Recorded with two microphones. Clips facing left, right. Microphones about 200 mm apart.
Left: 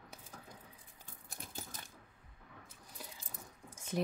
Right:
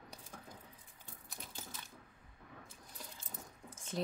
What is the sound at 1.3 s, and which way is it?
Coin, 45° left (ahead or behind).